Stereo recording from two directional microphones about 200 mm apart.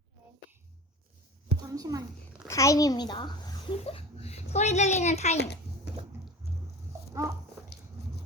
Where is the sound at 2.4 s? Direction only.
15° left (ahead or behind); by 5.3 s 35° left (ahead or behind).